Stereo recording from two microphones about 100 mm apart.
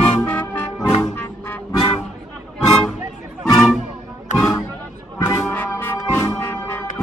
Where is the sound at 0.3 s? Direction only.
20° left (ahead or behind).